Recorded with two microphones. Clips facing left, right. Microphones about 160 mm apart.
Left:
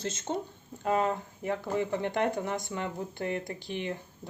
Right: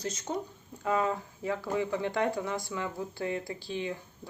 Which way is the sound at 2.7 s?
40° left (ahead or behind).